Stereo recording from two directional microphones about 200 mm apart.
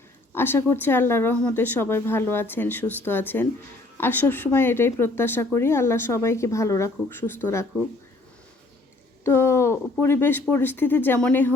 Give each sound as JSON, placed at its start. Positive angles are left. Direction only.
{"t": 0.3, "sound": "a woman's voice", "side_deg": 10}
{"t": 9.2, "sound": "a woman's voice", "side_deg": 15}